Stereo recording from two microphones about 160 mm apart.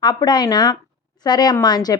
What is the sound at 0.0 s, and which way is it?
Speech, 25° left (ahead or behind).